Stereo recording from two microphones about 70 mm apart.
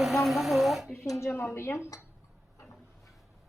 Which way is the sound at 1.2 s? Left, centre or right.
Left.